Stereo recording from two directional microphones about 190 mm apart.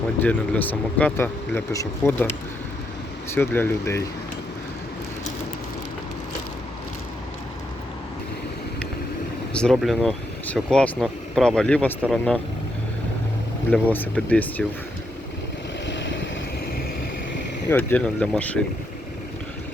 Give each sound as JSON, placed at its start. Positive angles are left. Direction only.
{"t": 0.2, "sound": "speech", "side_deg": 10}
{"t": 3.3, "sound": "speech", "side_deg": 10}
{"t": 9.5, "sound": "vehicle", "side_deg": 5}
{"t": 9.7, "sound": "speech", "side_deg": 0}
{"t": 13.9, "sound": "speech", "side_deg": 10}
{"t": 15.9, "sound": "vehicle", "side_deg": 70}
{"t": 17.7, "sound": "speech", "side_deg": 10}